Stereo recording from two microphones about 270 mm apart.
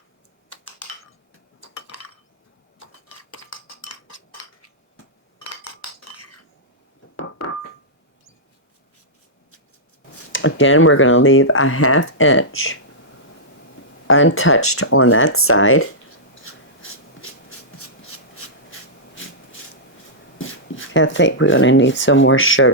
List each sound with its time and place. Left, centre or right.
0.5 s typing: left
1.7 s chink: left
3.1 s chink: left
7.2 s keyboard: left
10.3 s speech: left
14.1 s speech: left
16.4 s rub: left
17.7 s a sound: left
20.4 s speech: left